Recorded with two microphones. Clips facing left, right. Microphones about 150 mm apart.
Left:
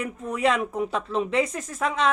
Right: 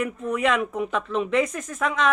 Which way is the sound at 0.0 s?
35° left (ahead or behind).